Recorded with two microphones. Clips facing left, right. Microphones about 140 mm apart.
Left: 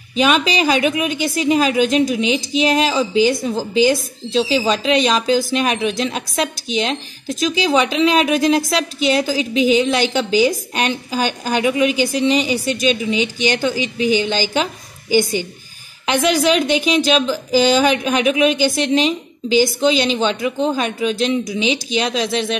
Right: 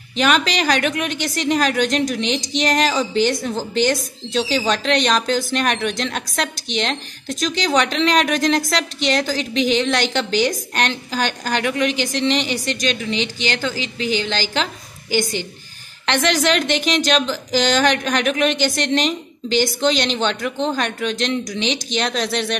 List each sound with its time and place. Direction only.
0.2 s a woman's voice: 10° left (ahead or behind)
16.1 s speech: 10° left (ahead or behind)